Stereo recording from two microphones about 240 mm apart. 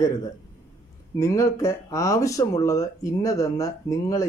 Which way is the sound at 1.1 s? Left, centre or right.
Centre.